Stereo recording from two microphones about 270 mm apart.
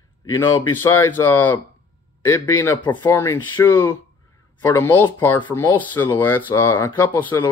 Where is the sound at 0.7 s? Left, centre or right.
Centre.